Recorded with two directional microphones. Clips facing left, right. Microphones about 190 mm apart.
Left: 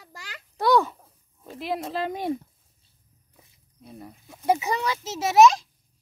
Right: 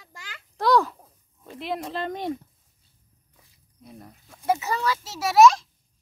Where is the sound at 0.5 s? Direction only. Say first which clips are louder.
Even; centre (ahead or behind).